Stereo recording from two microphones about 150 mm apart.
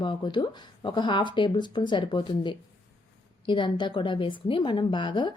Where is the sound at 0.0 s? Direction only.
30° left (ahead or behind).